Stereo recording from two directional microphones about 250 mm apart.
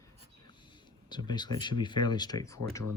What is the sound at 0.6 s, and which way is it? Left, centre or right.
Speech, centre.